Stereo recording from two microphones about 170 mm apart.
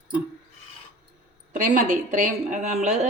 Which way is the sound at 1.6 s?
45° right (ahead or behind).